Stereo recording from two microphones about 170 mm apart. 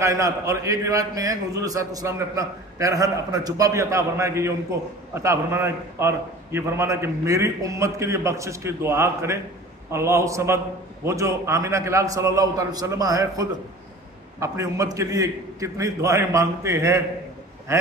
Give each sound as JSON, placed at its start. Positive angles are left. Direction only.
{"t": 0.0, "sound": "a man's voice", "side_deg": -20}